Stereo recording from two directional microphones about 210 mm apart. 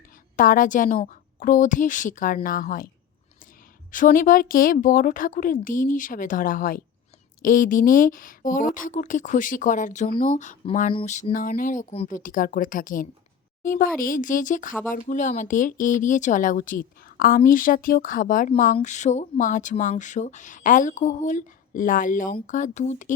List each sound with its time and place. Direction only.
0.3 s speech: 40° left (ahead or behind)
3.9 s speech: 40° left (ahead or behind)